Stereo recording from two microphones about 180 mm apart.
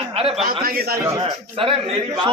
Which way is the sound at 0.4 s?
55° right (ahead or behind).